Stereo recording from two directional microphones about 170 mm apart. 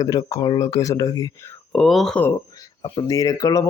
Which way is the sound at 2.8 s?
25° left (ahead or behind).